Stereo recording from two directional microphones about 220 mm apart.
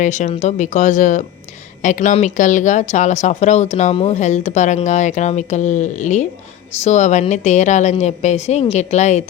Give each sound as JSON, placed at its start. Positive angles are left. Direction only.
{"t": 0.0, "sound": "speech", "side_deg": 30}